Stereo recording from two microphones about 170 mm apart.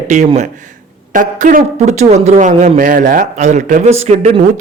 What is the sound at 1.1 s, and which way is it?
A man's voice, 50° right (ahead or behind).